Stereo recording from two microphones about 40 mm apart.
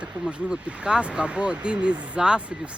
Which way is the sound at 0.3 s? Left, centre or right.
Right.